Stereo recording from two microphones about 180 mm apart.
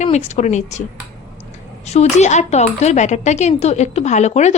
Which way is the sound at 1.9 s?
40° left (ahead or behind).